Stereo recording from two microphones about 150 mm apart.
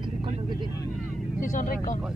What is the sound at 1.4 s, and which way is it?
Speech, 60° left (ahead or behind).